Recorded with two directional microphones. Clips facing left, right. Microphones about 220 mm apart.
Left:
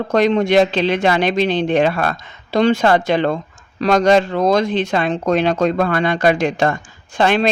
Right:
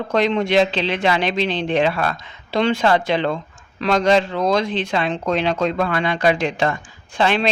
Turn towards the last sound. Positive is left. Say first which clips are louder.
# left 3 dB
turn(degrees=45)  # may be behind; listen again after turning